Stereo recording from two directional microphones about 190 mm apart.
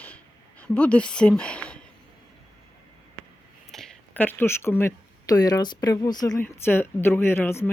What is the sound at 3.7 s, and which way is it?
Speech, 5° left (ahead or behind).